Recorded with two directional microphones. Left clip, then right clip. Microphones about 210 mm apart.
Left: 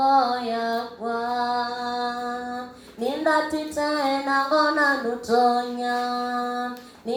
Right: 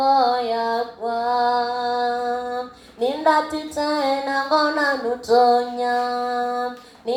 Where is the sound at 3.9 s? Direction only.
40° right (ahead or behind).